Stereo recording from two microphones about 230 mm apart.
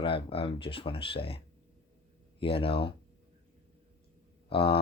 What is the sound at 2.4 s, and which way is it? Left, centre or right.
Speech, left.